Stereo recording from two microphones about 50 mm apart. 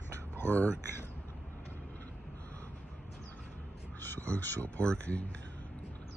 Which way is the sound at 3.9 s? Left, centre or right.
Left.